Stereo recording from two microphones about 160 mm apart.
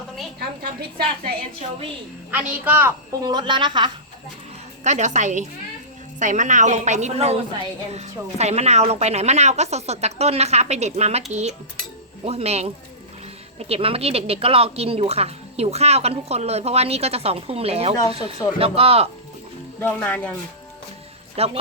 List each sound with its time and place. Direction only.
0.3 s a woman's voice: 85° right
2.3 s a woman's voice: 10° right (ahead or behind)
3.2 s speech: 30° right (ahead or behind)
4.8 s a woman's voice: 45° right (ahead or behind)
19.8 s speech: 10° left (ahead or behind)
21.3 s a woman's voice: 40° right (ahead or behind)